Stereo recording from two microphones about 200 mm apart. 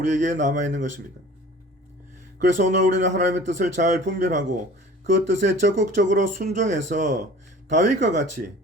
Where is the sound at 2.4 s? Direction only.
40° right (ahead or behind).